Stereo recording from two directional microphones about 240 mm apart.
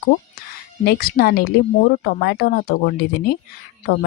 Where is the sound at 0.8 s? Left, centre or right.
Left.